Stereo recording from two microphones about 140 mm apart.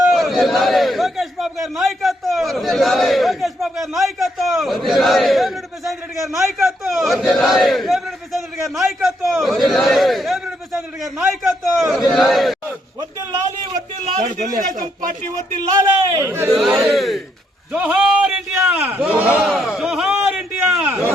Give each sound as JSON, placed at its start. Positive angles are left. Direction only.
{"t": 0.1, "sound": "a man's voice", "side_deg": 0}
{"t": 11.2, "sound": "a man's voice", "side_deg": -15}
{"t": 11.9, "sound": "a man's voice", "side_deg": 0}
{"t": 14.0, "sound": "a man's voice", "side_deg": -65}
{"t": 15.7, "sound": "a man's voice", "side_deg": -20}
{"t": 16.8, "sound": "a man's voice", "side_deg": 0}
{"t": 17.7, "sound": "a man's voice", "side_deg": -10}
{"t": 18.5, "sound": "a man's voice", "side_deg": -15}